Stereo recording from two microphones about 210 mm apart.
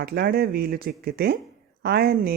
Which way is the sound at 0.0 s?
45° right (ahead or behind).